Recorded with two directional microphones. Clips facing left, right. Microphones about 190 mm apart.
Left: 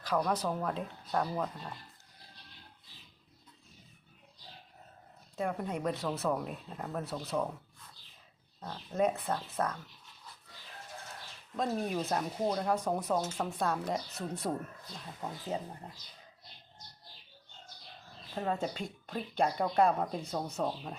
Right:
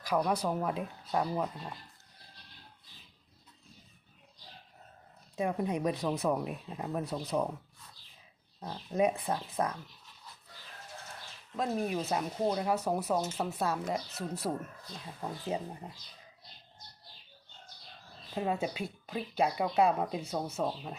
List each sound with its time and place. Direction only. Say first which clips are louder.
0.0 s speech: right 1 dB; 10° right (ahead or behind)
5.4 s speech: right 3 dB; 15° right (ahead or behind)
8.6 s speech: right 1 dB; 15° right (ahead or behind)
11.5 s speech: right 1 dB; 5° right (ahead or behind)
18.3 s speech: right 1 dB; 10° right (ahead or behind)